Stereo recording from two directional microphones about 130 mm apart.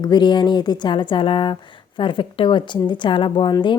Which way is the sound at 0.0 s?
35° left (ahead or behind).